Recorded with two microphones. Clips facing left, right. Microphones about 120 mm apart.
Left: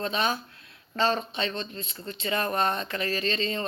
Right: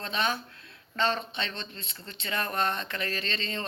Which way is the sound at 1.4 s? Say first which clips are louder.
Left 5 dB; 15° left (ahead or behind).